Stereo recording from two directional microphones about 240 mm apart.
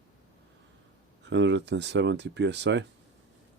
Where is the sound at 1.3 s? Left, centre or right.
Right.